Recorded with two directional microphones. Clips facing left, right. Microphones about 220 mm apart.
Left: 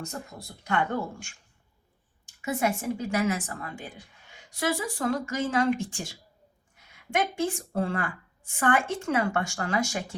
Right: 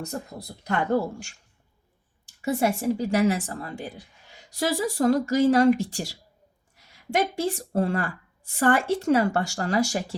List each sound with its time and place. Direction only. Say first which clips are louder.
0.0 s a woman's voice: right 4 dB; 40° right (ahead or behind)
2.4 s a woman's voice: right 4 dB; 30° right (ahead or behind)
7.6 s a woman's voice: right 4 dB; 40° right (ahead or behind)